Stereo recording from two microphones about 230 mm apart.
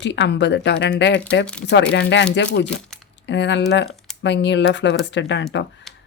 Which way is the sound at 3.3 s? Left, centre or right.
Left.